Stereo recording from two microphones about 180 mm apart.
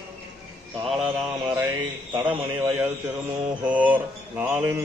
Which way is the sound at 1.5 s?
20° right (ahead or behind).